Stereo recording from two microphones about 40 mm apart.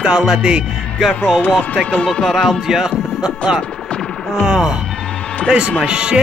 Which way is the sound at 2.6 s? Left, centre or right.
Centre.